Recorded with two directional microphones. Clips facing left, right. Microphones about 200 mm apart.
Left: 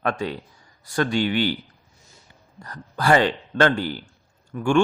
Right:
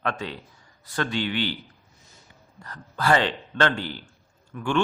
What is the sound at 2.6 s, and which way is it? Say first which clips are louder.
A man's voice: left 2 dB; 40° left (ahead or behind).